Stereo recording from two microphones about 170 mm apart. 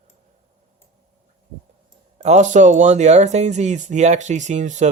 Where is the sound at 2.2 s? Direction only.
45° right (ahead or behind).